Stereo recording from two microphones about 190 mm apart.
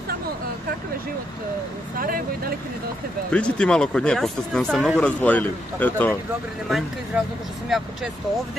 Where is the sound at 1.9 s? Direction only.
50° right (ahead or behind).